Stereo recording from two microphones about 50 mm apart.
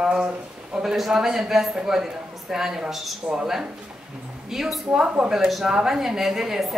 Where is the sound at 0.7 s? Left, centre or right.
Centre.